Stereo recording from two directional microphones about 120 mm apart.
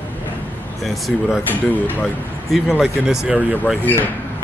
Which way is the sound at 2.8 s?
5° right (ahead or behind).